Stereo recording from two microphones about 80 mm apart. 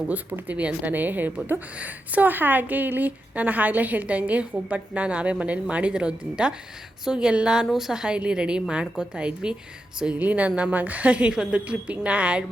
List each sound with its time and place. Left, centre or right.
0.4 s a woman's voice: centre